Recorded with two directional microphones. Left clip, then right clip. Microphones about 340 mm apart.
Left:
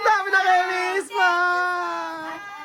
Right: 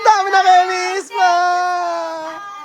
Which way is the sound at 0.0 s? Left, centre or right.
Centre.